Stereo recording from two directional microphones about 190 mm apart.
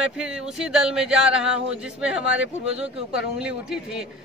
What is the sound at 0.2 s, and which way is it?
A man's voice, 5° right (ahead or behind).